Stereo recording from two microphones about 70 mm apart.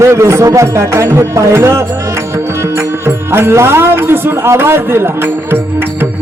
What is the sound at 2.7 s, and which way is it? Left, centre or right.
Speech, right.